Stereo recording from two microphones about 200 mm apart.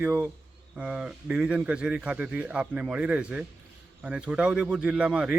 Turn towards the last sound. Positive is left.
turn(degrees=-5)  # may be behind; listen again after turning